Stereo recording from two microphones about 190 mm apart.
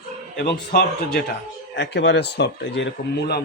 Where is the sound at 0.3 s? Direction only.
55° left (ahead or behind).